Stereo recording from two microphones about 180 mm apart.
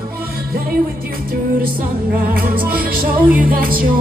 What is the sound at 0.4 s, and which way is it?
Music, 55° right (ahead or behind).